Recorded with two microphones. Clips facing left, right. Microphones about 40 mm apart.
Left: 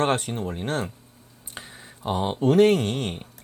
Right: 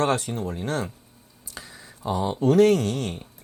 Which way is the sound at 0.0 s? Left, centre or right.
Left.